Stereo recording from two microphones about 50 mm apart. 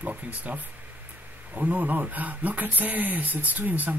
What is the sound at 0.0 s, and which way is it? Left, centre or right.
Speech, right.